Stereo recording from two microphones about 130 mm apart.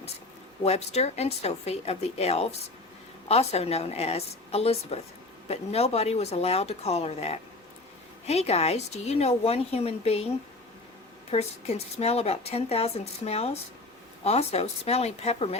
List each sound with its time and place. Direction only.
0.6 s a woman's voice: 55° left (ahead or behind)
11.3 s a woman's voice: 55° left (ahead or behind)